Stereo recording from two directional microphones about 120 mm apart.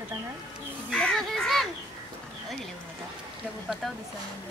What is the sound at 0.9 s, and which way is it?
Speech, 5° left (ahead or behind).